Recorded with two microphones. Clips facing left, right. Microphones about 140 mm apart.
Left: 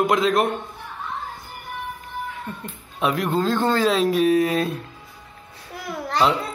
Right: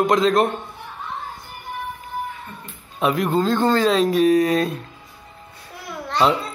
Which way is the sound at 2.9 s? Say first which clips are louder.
Right 2 dB; centre (ahead or behind).